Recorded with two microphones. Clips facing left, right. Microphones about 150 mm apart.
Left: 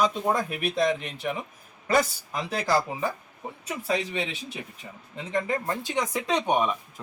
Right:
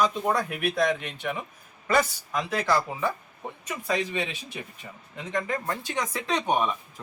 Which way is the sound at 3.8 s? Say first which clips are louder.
Even; 25° left (ahead or behind).